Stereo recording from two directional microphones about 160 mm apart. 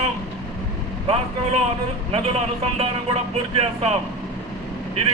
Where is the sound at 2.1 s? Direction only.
40° right (ahead or behind).